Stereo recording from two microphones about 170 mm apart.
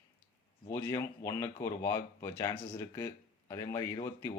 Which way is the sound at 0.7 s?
15° left (ahead or behind).